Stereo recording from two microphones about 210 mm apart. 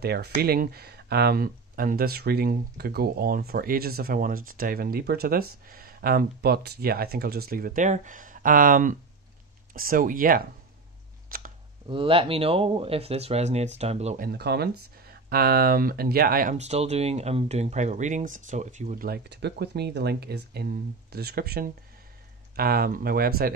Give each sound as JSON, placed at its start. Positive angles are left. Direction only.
{"t": 0.0, "sound": "speech", "side_deg": -50}
{"t": 11.2, "sound": "a sound", "side_deg": -45}
{"t": 11.9, "sound": "speech", "side_deg": -25}